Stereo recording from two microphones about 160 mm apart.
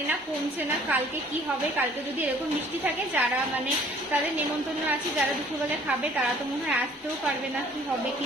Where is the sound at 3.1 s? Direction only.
10° right (ahead or behind).